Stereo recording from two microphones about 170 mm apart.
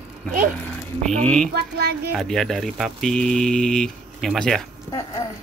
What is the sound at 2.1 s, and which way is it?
Speech, centre (ahead or behind).